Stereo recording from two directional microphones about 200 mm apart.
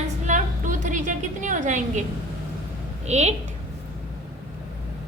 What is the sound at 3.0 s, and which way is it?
Speech, 35° right (ahead or behind).